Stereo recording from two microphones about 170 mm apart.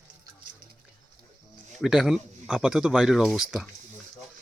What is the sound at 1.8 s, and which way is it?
Speech, centre (ahead or behind).